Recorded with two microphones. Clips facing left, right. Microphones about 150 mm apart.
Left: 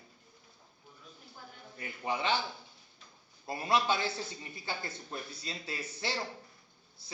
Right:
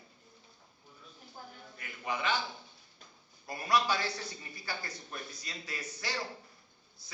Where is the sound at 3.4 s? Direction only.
25° left (ahead or behind).